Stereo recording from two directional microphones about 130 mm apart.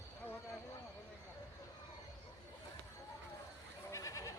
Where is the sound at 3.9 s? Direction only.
25° left (ahead or behind).